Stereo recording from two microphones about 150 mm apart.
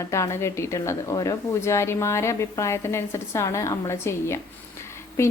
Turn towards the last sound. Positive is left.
turn(degrees=20)  # may be behind; listen again after turning